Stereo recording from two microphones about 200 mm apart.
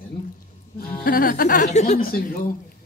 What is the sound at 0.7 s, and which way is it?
Speech, 45° left (ahead or behind).